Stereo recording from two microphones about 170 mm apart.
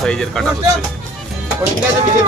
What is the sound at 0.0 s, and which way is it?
Speech, 5° left (ahead or behind).